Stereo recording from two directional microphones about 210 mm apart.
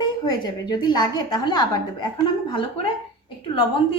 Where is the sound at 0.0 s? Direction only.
20° left (ahead or behind).